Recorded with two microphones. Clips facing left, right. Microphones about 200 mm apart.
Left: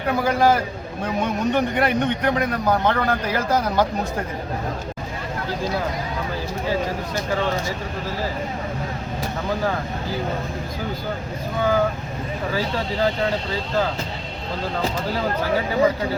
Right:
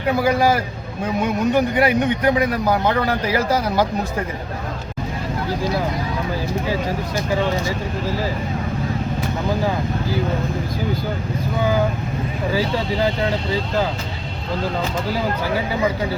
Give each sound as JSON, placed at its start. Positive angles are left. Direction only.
{"t": 0.2, "sound": "a man's voice", "side_deg": -10}